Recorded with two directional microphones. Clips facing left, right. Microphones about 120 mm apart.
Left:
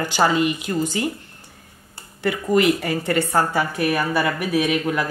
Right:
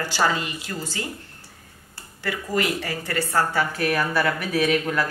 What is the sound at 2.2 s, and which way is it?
Speech, 20° left (ahead or behind).